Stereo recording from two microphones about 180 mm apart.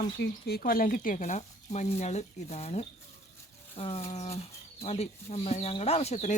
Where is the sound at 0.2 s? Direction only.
60° left (ahead or behind).